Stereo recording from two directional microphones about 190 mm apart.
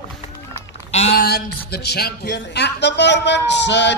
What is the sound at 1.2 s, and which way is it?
Speech, 55° left (ahead or behind).